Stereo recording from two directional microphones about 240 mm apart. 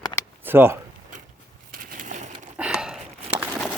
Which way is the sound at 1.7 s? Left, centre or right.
Right.